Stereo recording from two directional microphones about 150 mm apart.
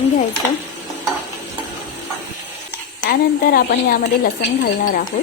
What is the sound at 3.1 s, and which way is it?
A woman's voice, 75° left (ahead or behind).